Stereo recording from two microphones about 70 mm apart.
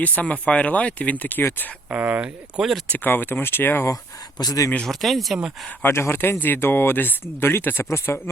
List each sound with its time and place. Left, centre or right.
0.0 s speech: left
1.9 s speech: right
2.2 s speech: centre
2.9 s speech: left
4.4 s speech: left
4.9 s speech: centre
5.8 s speech: left